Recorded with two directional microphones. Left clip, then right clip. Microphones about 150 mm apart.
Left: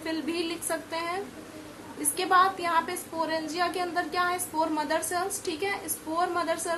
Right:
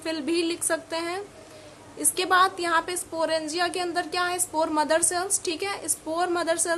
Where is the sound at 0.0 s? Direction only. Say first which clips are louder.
Right 4 dB; 35° right (ahead or behind).